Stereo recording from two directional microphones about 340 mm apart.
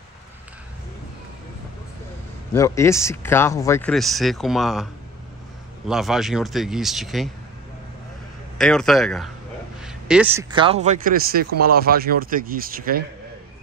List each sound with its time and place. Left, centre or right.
2.5 s speech: centre
5.9 s speech: centre
8.5 s a man's voice: centre; by 13.0 s right